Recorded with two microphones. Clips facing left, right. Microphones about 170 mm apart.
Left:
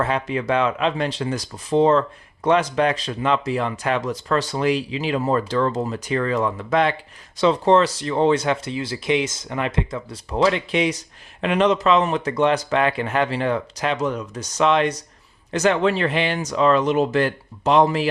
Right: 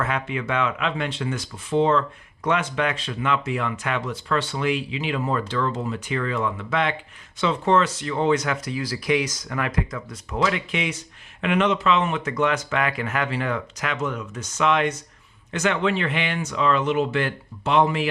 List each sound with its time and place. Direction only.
0.0 s speech: 35° left (ahead or behind)